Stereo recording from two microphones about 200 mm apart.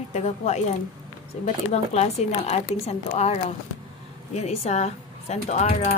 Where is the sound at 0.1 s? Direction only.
30° left (ahead or behind).